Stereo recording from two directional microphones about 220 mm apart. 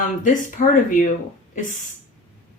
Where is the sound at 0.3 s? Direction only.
35° left (ahead or behind).